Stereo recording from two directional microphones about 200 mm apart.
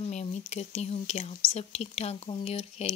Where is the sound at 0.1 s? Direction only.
35° left (ahead or behind).